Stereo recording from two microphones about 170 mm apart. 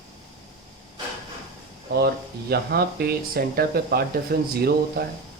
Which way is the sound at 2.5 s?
70° right (ahead or behind).